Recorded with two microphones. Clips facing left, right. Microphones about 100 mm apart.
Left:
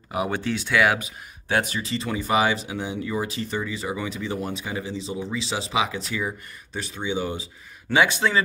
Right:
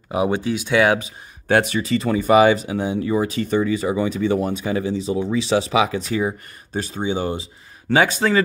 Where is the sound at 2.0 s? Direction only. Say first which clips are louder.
Right 8 dB; 50° right (ahead or behind).